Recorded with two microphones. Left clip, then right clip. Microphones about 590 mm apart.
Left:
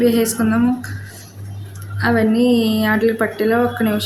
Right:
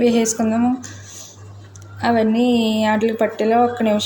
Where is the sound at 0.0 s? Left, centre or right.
Left.